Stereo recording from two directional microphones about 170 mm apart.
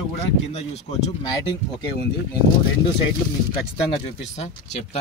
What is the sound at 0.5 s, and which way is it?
Speech, 40° left (ahead or behind).